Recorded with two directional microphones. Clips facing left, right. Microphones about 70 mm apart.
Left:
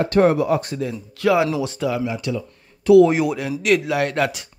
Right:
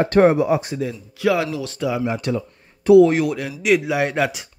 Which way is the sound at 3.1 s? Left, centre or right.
Centre.